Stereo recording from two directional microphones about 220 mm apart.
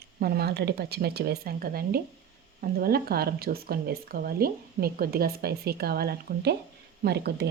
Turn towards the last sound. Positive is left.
turn(degrees=-45)  # may be behind; listen again after turning